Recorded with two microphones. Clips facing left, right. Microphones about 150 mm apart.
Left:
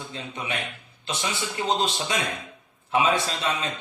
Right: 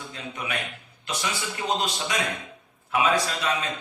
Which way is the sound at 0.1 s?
25° left (ahead or behind).